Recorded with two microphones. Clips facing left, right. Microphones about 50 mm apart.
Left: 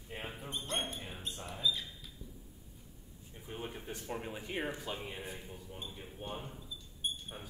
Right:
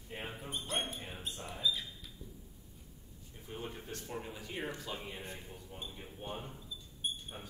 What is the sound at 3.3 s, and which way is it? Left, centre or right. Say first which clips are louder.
Speech: left 1 dB; centre.